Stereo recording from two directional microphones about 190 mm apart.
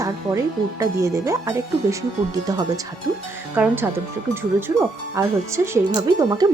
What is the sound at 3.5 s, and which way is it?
Speech, 10° right (ahead or behind).